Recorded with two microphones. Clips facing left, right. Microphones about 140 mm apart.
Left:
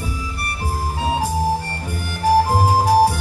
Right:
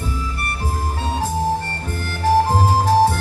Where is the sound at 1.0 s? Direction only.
10° left (ahead or behind).